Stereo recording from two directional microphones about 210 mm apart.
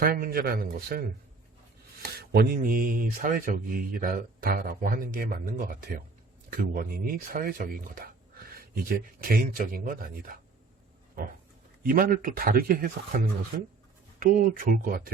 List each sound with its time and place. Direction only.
0.0 s speech: 45° right (ahead or behind)
11.8 s speech: 45° right (ahead or behind)